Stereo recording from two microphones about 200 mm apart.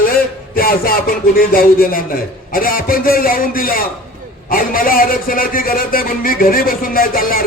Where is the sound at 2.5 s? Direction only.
45° left (ahead or behind).